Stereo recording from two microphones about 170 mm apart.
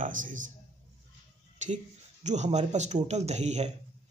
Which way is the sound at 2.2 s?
45° right (ahead or behind).